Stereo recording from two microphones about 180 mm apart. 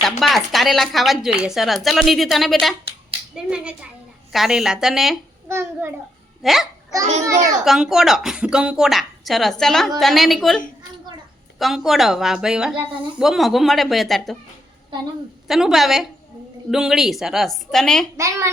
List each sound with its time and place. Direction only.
0.0 s a woman's voice: centre (ahead or behind)
5.5 s a child's voice: 15° right (ahead or behind)
6.4 s a child's voice: centre (ahead or behind)
7.3 s a child's voice: 15° right (ahead or behind)
7.6 s a woman's voice: centre (ahead or behind)
11.6 s a woman's voice: centre (ahead or behind)
15.4 s a woman's voice: centre (ahead or behind)
18.2 s a child's voice: 15° right (ahead or behind)